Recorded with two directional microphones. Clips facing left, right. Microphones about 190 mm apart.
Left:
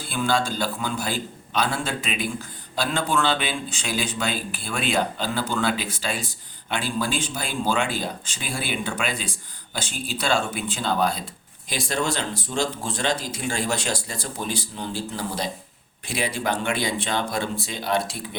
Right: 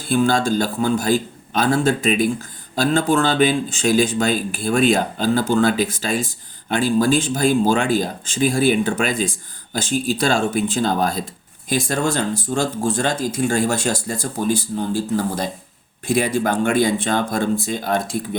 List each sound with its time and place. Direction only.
0.0 s a man's voice: 45° right (ahead or behind)